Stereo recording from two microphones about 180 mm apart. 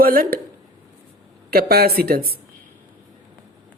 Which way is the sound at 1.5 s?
60° right (ahead or behind).